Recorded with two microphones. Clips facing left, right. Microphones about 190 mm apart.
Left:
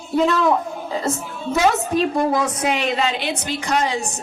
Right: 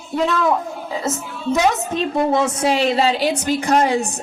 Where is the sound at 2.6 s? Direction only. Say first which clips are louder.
Right 4 dB; 30° right (ahead or behind); by 4.1 s 55° right (ahead or behind).